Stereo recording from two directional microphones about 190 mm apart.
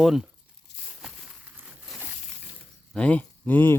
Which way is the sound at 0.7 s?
65° left (ahead or behind).